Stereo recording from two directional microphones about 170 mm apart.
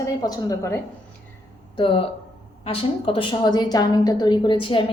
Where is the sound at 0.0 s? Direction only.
20° left (ahead or behind).